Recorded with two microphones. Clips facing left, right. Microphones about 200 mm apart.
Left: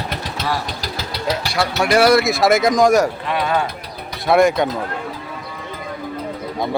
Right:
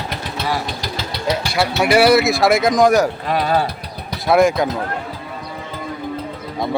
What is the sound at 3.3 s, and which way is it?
Speech, 35° right (ahead or behind).